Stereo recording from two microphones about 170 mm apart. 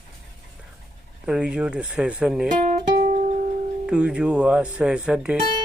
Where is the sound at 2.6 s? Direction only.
45° right (ahead or behind).